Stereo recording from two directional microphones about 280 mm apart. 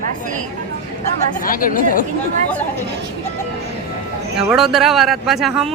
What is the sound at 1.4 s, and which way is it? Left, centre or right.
Speech, left.